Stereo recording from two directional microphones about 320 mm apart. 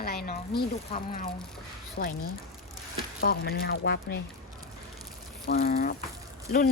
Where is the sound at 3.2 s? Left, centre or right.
Left.